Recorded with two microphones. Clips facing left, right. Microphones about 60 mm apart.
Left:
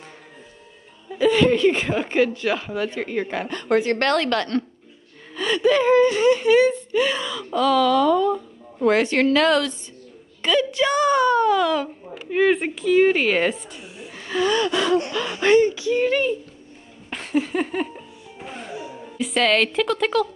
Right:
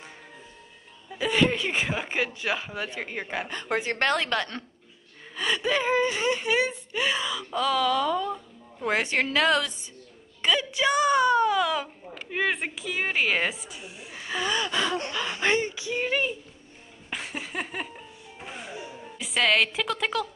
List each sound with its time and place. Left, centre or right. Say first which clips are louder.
1.1 s speech: left 7 dB; centre
16.0 s speech: left 6 dB; centre
17.1 s music: left 11 dB; centre
19.1 s speech: left 4 dB; centre